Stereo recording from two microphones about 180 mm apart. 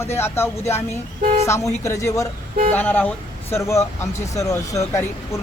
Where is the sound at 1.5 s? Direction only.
15° left (ahead or behind).